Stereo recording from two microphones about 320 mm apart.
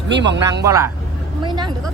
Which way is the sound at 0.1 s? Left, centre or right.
Right.